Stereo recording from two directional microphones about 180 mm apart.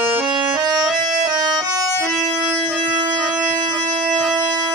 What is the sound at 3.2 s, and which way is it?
Music, 20° right (ahead or behind).